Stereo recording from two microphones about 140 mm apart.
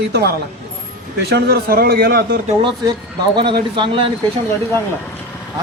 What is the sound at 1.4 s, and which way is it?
Speech, 90° right.